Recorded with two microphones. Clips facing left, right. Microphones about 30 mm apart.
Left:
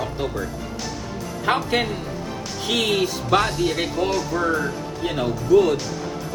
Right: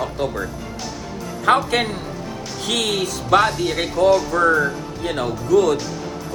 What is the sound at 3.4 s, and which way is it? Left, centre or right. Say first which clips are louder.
Speech: right 4 dB; centre.